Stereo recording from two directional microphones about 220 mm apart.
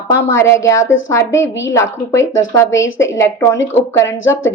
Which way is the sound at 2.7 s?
60° left (ahead or behind).